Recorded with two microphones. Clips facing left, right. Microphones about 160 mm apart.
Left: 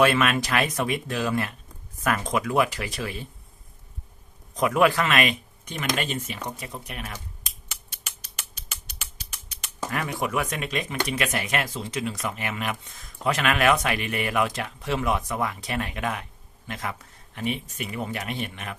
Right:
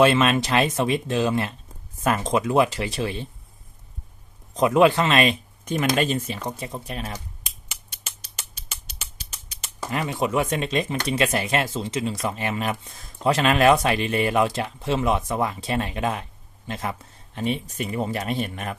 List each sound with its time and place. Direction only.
0.0 s speech: 25° right (ahead or behind)
4.5 s speech: 25° right (ahead or behind)
5.7 s speech: 45° right (ahead or behind)
8.0 s scissors: 25° right (ahead or behind)
9.9 s speech: 20° right (ahead or behind); by 18.8 s 40° right (ahead or behind)